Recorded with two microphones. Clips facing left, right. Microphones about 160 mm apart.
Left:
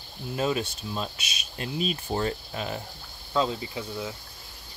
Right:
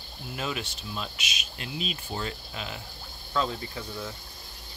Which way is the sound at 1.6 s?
45° left (ahead or behind).